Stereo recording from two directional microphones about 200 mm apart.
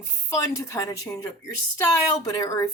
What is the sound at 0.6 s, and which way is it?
Speech, 15° left (ahead or behind).